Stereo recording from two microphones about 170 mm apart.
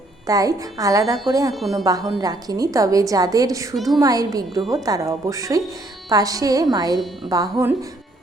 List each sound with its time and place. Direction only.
0.3 s a woman's voice: 20° right (ahead or behind)
3.8 s a woman's voice: centre (ahead or behind)
4.0 s a woman's voice: 20° right (ahead or behind)